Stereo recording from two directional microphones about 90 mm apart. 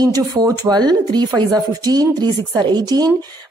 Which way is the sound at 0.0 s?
45° right (ahead or behind).